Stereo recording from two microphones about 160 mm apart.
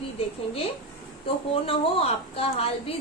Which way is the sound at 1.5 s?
35° left (ahead or behind).